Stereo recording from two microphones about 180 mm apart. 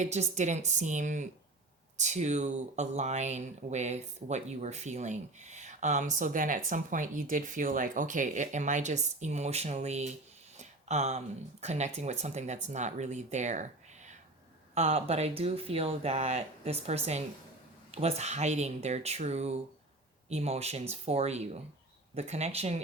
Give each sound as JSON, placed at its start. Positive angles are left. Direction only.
{"t": 0.0, "sound": "speech", "side_deg": -40}
{"t": 10.6, "sound": "a sound", "side_deg": -40}
{"t": 11.6, "sound": "speech", "side_deg": -40}
{"t": 14.8, "sound": "speech", "side_deg": -35}